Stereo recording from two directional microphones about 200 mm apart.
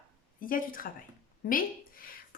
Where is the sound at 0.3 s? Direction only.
45° left (ahead or behind).